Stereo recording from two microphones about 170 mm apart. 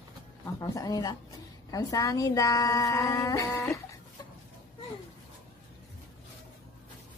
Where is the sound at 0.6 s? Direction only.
20° left (ahead or behind).